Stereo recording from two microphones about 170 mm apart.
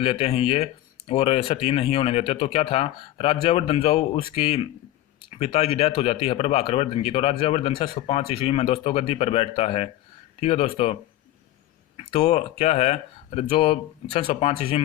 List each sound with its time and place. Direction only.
0.0 s speech: 35° left (ahead or behind)
12.1 s speech: 35° left (ahead or behind)